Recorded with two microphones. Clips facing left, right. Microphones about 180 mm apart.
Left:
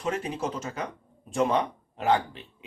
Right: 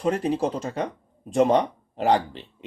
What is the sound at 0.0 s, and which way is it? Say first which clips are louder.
Speech: right 7 dB; 35° right (ahead or behind).